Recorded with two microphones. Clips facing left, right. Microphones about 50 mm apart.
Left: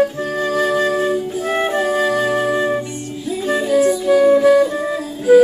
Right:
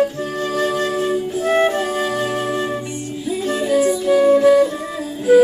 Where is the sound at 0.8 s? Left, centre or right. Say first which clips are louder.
Left 2 dB; centre.